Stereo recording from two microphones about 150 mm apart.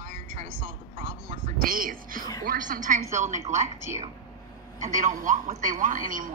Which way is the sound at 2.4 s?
65° right (ahead or behind).